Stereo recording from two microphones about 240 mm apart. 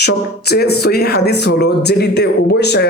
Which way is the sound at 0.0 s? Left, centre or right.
Left.